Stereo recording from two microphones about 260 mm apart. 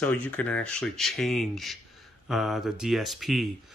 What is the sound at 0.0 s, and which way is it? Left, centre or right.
Speech, centre.